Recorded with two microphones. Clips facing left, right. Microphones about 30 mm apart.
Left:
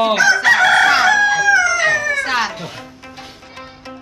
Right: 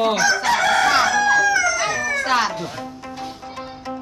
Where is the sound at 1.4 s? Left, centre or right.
Left.